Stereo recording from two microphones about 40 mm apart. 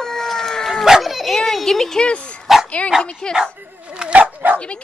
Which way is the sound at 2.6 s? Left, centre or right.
Left.